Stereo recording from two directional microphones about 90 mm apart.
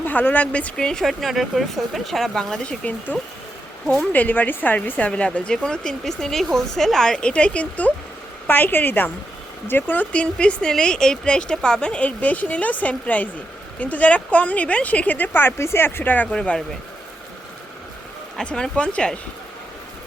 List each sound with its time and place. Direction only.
0.0 s speech: 20° left (ahead or behind); by 2.7 s 5° left (ahead or behind)
3.1 s a woman's voice: 20° left (ahead or behind)
18.3 s a woman's voice: 10° left (ahead or behind)